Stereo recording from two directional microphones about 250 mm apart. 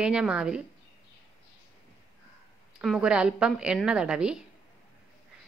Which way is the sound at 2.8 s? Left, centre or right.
Centre.